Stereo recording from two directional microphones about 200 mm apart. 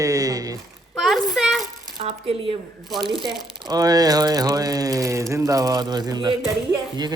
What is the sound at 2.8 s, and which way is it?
Speech, centre (ahead or behind).